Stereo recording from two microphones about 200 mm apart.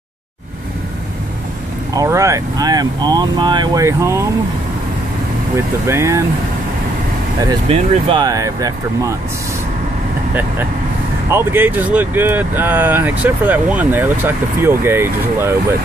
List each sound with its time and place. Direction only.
2.0 s speech: 15° right (ahead or behind)
5.9 s speech: 15° right (ahead or behind)
7.6 s speech: 25° right (ahead or behind)
11.2 s speech: 10° right (ahead or behind)